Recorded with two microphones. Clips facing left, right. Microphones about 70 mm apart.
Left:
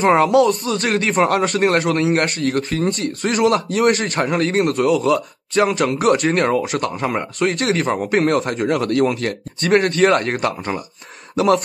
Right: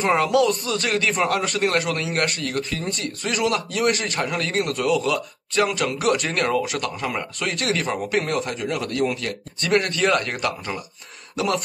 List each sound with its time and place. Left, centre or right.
0.0 s speech: left
1.2 s speech: left
8.2 s speech: left
9.2 s speech: left
11.3 s speech: left